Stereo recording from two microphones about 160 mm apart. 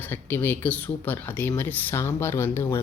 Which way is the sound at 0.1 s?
10° left (ahead or behind).